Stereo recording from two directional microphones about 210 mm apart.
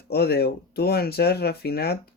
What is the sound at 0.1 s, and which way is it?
Speech, 50° left (ahead or behind).